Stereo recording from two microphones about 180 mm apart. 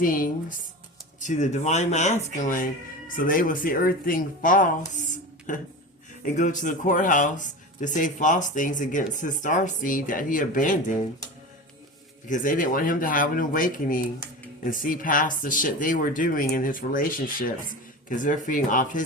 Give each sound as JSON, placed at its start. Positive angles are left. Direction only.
{"t": 0.0, "sound": "speech", "side_deg": 50}
{"t": 12.3, "sound": "speech", "side_deg": 50}